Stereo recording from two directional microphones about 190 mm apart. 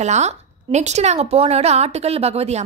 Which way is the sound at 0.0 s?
35° right (ahead or behind).